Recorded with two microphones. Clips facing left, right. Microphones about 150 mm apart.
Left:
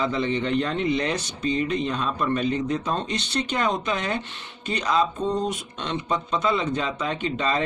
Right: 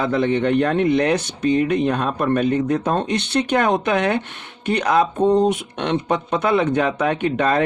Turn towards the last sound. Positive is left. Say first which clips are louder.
# right 7 dB
turn(degrees=-60)  # may be behind; listen again after turning